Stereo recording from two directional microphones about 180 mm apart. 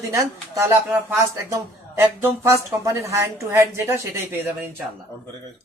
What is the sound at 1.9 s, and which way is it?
Speech, 15° right (ahead or behind).